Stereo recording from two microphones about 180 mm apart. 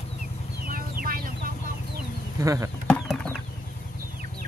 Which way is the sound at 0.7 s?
50° right (ahead or behind).